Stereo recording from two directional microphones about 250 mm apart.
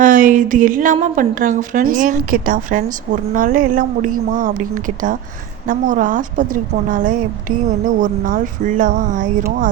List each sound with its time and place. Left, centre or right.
0.0 s a woman's voice: right